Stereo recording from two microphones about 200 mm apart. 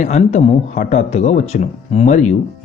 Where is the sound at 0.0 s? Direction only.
35° left (ahead or behind).